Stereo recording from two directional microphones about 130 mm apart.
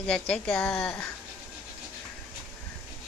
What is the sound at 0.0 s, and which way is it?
Speech, 10° left (ahead or behind).